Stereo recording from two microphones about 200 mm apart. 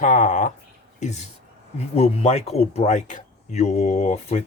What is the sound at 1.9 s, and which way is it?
Speech, 30° left (ahead or behind).